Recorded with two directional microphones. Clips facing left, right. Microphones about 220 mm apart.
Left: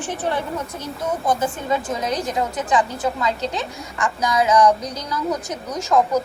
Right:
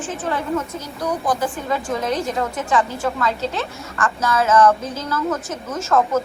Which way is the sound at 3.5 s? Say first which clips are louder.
Right 1 dB; 15° left (ahead or behind).